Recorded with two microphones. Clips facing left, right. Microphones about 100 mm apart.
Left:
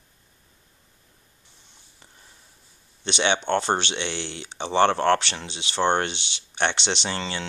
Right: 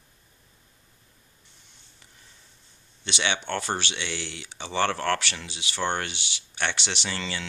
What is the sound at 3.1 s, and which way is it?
Speech, 25° left (ahead or behind).